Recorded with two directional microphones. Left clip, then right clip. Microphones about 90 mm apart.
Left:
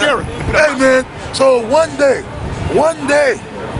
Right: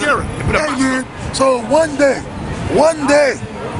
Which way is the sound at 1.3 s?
Centre (ahead or behind).